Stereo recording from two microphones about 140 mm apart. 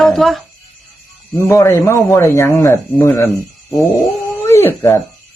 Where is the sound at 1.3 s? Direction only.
20° left (ahead or behind).